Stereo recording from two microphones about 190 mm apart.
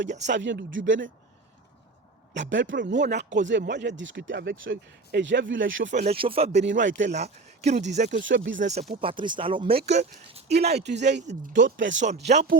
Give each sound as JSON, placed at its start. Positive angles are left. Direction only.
{"t": 0.2, "sound": "speech", "side_deg": -70}
{"t": 2.3, "sound": "speech", "side_deg": -70}
{"t": 5.9, "sound": "speech", "side_deg": -35}
{"t": 6.6, "sound": "speech", "side_deg": -65}
{"t": 7.2, "sound": "speech", "side_deg": -35}
{"t": 8.2, "sound": "speech", "side_deg": -80}
{"t": 8.7, "sound": "speech", "side_deg": -35}
{"t": 10.8, "sound": "a man's voice", "side_deg": -65}
{"t": 11.0, "sound": "speech", "side_deg": -40}
{"t": 11.5, "sound": "speech", "side_deg": -75}
{"t": 12.2, "sound": "speech", "side_deg": -35}